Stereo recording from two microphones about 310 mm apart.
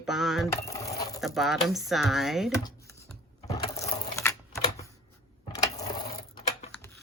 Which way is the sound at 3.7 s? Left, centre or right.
Centre.